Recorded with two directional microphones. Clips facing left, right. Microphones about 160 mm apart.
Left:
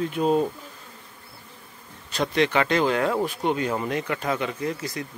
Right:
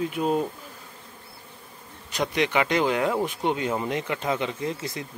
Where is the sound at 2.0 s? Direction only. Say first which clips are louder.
Left 2 dB; 15° right (ahead or behind).